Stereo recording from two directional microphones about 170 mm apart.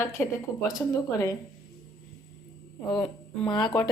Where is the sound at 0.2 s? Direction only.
10° left (ahead or behind).